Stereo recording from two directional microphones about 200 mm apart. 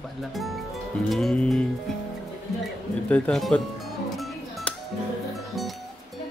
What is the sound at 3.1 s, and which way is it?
Music, centre (ahead or behind).